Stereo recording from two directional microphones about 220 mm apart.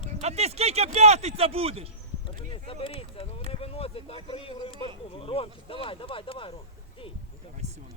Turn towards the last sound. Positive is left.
turn(degrees=25)  # may be behind; listen again after turning